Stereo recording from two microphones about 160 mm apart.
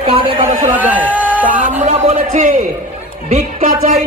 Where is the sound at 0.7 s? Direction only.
10° right (ahead or behind).